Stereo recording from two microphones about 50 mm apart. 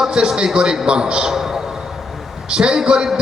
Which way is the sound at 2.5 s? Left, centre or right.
Centre.